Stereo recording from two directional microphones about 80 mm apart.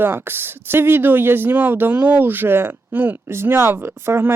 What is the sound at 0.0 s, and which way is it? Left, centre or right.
Speech, right.